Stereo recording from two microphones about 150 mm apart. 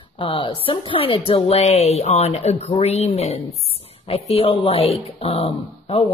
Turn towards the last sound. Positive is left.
turn(degrees=40)  # may be behind; listen again after turning